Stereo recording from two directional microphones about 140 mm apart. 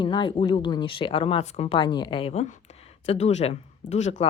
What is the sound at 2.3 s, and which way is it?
A woman's voice, 55° left (ahead or behind).